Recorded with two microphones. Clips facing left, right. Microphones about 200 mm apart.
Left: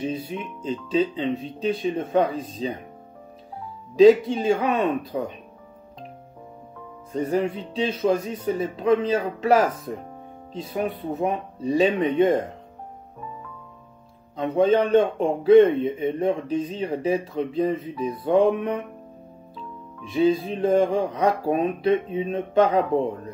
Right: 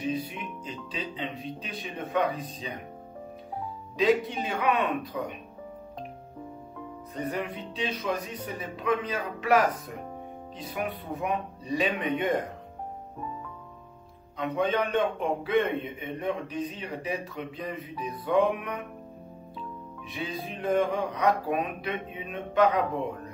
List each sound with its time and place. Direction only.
0.0 s a man's voice: 25° left (ahead or behind)
4.0 s a man's voice: 30° left (ahead or behind)
7.1 s a man's voice: 30° left (ahead or behind)
14.3 s a man's voice: 30° left (ahead or behind)
20.2 s a man's voice: 25° left (ahead or behind)